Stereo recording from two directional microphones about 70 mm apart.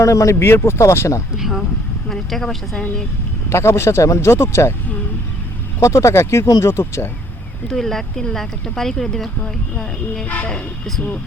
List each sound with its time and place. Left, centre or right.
0.0 s speech: left
1.4 s a sound: centre
2.0 s speech: centre
3.5 s speech: left
5.8 s speech: left
7.7 s speech: centre
10.2 s speech: left